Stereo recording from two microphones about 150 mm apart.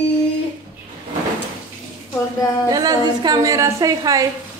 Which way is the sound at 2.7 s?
25° right (ahead or behind).